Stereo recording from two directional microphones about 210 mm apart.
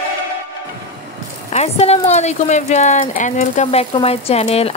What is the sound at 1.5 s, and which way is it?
Speech, 30° left (ahead or behind).